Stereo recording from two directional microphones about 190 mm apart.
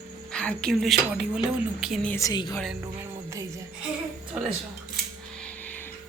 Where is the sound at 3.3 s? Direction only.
15° right (ahead or behind).